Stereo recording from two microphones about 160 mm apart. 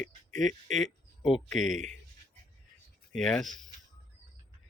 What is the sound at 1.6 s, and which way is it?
Speech, 50° right (ahead or behind).